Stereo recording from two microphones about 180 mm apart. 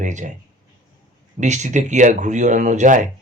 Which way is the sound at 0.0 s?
45° right (ahead or behind).